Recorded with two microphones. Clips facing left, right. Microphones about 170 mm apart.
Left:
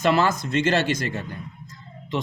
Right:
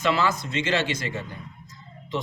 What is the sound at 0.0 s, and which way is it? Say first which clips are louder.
Speech: left 3 dB; 45° left (ahead or behind).